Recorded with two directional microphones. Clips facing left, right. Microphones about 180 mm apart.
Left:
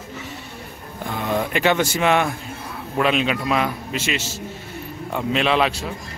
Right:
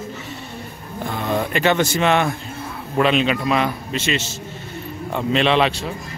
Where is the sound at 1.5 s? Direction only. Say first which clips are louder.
Right 2 dB; 10° left (ahead or behind).